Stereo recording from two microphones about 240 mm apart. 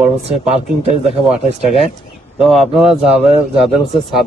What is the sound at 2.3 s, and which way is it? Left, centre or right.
Speech, centre.